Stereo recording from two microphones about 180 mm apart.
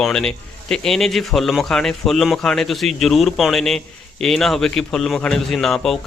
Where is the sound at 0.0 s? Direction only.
5° left (ahead or behind).